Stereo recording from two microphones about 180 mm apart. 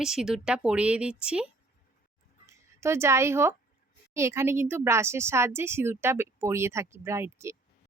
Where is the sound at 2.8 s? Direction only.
15° right (ahead or behind).